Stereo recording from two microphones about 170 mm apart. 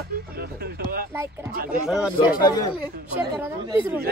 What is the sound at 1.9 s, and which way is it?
Speech, 5° right (ahead or behind).